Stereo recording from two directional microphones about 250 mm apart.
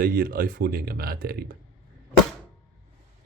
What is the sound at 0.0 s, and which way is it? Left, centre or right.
Speech, right.